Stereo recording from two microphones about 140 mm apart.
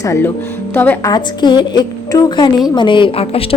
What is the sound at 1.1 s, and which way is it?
A woman's voice, 35° left (ahead or behind).